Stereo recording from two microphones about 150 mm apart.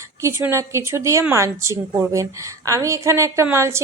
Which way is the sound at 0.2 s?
15° right (ahead or behind).